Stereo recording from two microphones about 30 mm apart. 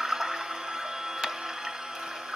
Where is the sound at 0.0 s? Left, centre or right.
Centre.